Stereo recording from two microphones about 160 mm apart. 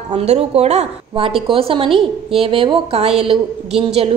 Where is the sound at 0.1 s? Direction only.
40° right (ahead or behind).